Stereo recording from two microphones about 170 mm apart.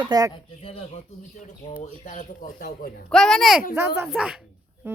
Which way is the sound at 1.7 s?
50° left (ahead or behind).